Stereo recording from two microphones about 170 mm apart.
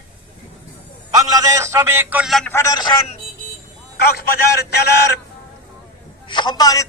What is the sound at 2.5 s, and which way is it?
Speech, 15° left (ahead or behind).